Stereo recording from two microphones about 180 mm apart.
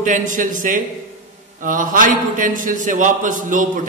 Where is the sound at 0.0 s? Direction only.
45° right (ahead or behind).